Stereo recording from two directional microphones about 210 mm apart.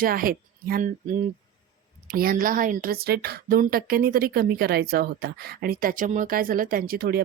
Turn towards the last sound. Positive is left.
turn(degrees=-50)  # may be behind; listen again after turning